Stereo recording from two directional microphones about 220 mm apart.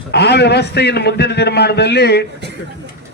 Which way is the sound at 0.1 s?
50° left (ahead or behind).